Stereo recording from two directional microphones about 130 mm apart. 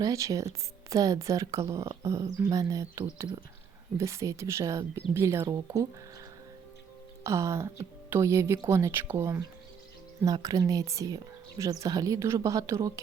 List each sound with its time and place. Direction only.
0.0 s speech: 25° right (ahead or behind)
7.3 s speech: 25° right (ahead or behind)